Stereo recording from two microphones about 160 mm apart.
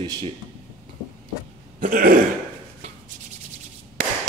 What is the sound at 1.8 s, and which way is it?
Throat clearing, 60° right (ahead or behind).